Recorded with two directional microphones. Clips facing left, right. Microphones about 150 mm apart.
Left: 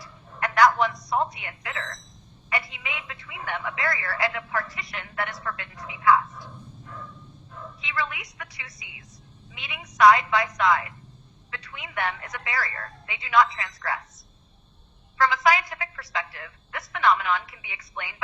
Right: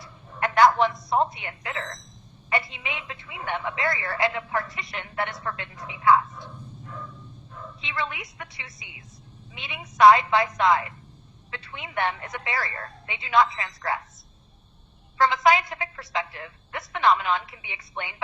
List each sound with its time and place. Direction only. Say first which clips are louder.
0.0 s a sound: right 2 dB; 25° right (ahead or behind)
1.1 s a woman's voice: right 2 dB; 25° right (ahead or behind)
7.8 s a woman's voice: even; 25° right (ahead or behind)
15.4 s a woman's voice: right 2 dB; 25° right (ahead or behind)